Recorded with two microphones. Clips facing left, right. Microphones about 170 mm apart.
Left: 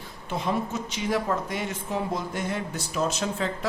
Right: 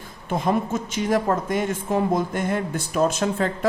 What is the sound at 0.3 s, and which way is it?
A woman's voice, 50° right (ahead or behind).